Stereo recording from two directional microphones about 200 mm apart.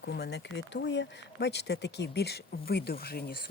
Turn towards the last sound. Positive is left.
turn(degrees=50)  # may be behind; listen again after turning